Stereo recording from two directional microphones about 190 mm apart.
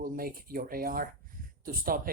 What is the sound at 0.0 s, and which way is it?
Speech, 50° right (ahead or behind).